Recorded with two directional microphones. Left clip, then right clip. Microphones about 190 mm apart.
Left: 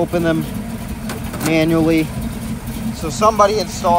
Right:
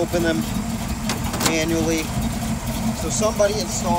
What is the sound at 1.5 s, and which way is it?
Speech, 25° left (ahead or behind).